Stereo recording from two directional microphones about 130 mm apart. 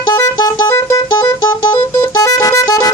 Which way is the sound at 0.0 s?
30° left (ahead or behind).